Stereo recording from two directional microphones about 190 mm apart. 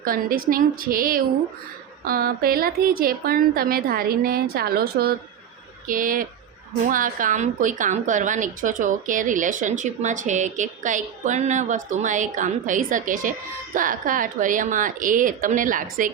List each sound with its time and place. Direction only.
0.0 s a woman's voice: 50° right (ahead or behind)